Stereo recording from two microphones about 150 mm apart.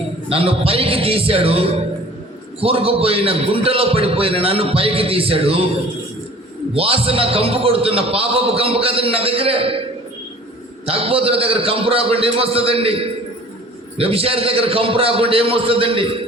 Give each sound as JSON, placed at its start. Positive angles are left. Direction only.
{"t": 0.3, "sound": "a man's voice", "side_deg": -40}
{"t": 6.7, "sound": "a man's voice", "side_deg": -40}
{"t": 10.8, "sound": "a man's voice", "side_deg": -40}